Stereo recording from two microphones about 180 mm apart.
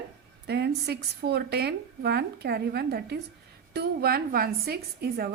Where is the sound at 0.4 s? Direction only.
65° right (ahead or behind).